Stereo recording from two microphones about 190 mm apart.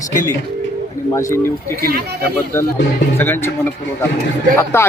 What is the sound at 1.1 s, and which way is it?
Speech, 15° left (ahead or behind).